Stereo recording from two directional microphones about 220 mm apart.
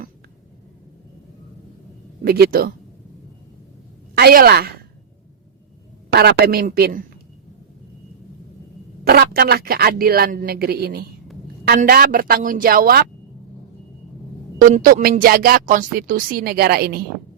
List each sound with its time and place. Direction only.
2.2 s a man's voice: 45° right (ahead or behind)
4.1 s a woman's voice: 45° right (ahead or behind)
6.1 s a man's voice: 45° right (ahead or behind)
9.0 s a man's voice: 45° right (ahead or behind)
14.6 s speech: 40° right (ahead or behind)